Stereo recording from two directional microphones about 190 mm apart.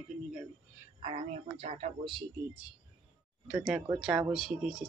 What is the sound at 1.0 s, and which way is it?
A woman's voice, 35° right (ahead or behind).